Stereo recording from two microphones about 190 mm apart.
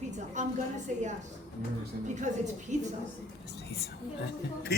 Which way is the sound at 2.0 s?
40° right (ahead or behind).